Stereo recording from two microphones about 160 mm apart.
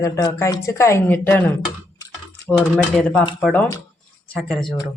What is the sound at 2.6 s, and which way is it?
Speech, 10° left (ahead or behind).